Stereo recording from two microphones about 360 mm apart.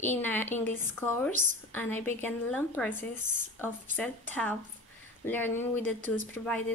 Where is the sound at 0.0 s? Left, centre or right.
Centre.